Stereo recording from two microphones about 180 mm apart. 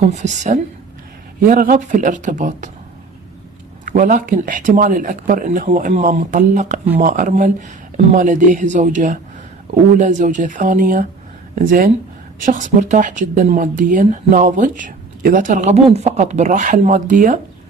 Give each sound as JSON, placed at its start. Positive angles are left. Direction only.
{"t": 0.0, "sound": "a woman's voice", "side_deg": -40}
{"t": 3.8, "sound": "speech", "side_deg": -45}